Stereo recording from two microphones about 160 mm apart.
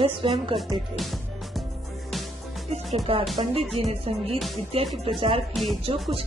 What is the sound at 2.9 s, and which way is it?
A woman's voice, 40° right (ahead or behind).